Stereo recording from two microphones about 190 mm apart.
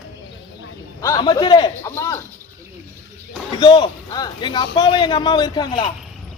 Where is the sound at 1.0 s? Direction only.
20° left (ahead or behind).